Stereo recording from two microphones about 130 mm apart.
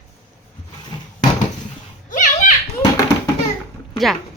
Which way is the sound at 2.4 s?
65° left (ahead or behind).